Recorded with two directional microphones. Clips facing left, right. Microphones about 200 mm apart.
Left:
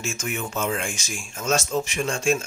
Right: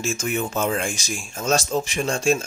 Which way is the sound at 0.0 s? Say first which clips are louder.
Right 5 dB; 35° right (ahead or behind).